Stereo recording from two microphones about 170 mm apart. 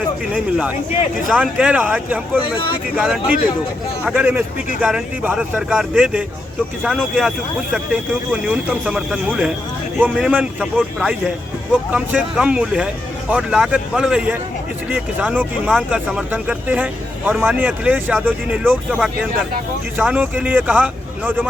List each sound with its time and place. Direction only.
0.3 s speech: 5° right (ahead or behind)